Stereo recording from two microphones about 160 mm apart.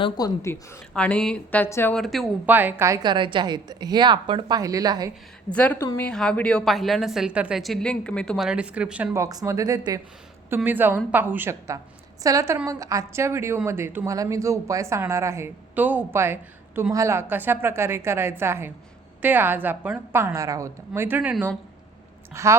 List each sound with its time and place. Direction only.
0.0 s a woman's voice: 25° left (ahead or behind)
0.9 s speech: 5° left (ahead or behind)
2.0 s a woman's voice: centre (ahead or behind)
2.5 s a woman's voice: 10° right (ahead or behind)
5.5 s a woman's voice: 10° left (ahead or behind)
9.1 s a woman's voice: 20° right (ahead or behind)
10.5 s a woman's voice: 10° right (ahead or behind)